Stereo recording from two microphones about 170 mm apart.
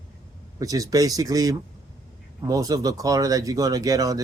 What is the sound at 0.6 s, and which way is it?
Speech, 20° right (ahead or behind).